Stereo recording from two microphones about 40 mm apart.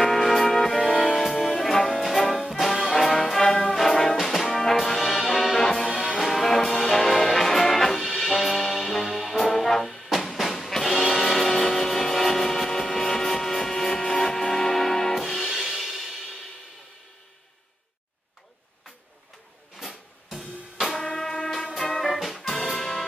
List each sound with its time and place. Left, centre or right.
0.0 s music: centre
1.6 s music: centre
2.6 s brass instrument: centre
5.2 s music: centre
6.1 s brass instrument: centre
10.0 s music: centre
19.8 s music: centre
21.0 s music: centre
21.9 s music: centre